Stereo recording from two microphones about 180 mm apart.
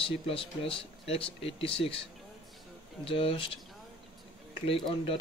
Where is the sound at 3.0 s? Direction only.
30° left (ahead or behind).